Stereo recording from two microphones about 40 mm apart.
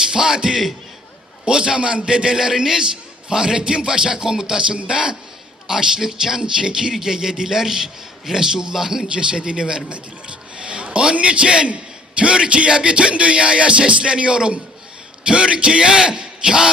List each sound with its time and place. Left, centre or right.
0.1 s speech: centre
1.5 s speech: right
9.0 s a man's voice: right